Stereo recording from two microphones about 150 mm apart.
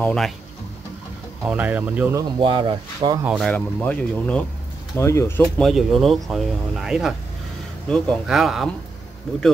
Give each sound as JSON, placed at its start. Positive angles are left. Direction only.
{"t": 0.0, "sound": "speech", "side_deg": 5}
{"t": 1.4, "sound": "speech", "side_deg": -10}
{"t": 2.1, "sound": "speech", "side_deg": -30}
{"t": 3.3, "sound": "speech", "side_deg": 5}
{"t": 4.9, "sound": "speech", "side_deg": 20}
{"t": 5.6, "sound": "speech", "side_deg": 0}